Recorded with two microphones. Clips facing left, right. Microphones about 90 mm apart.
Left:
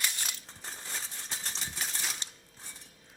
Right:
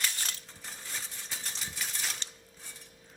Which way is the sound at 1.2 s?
30° left (ahead or behind).